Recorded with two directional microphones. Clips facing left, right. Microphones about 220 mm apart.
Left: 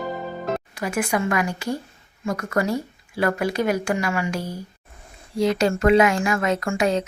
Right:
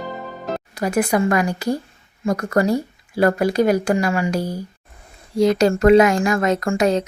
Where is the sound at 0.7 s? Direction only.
40° right (ahead or behind).